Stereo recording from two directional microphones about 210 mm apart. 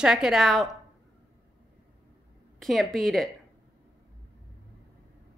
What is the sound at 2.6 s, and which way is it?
Speech, centre (ahead or behind).